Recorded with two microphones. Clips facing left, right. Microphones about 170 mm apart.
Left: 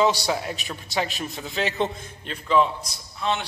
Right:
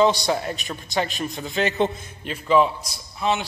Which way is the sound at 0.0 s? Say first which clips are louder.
Right 3 dB; 5° left (ahead or behind).